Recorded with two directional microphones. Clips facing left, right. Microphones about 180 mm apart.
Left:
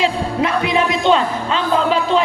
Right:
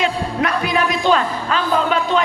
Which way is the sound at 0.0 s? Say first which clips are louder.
Left 2 dB; 25° left (ahead or behind).